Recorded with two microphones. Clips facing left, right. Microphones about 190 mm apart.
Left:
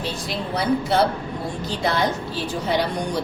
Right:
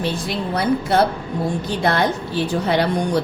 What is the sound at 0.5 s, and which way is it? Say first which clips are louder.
A woman's voice: right 2 dB; 55° right (ahead or behind).